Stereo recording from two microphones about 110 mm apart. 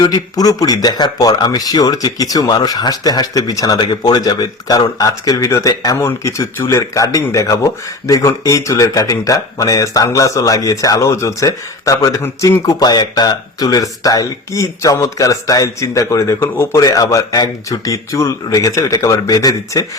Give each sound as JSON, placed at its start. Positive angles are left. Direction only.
{"t": 0.0, "sound": "speech", "side_deg": 35}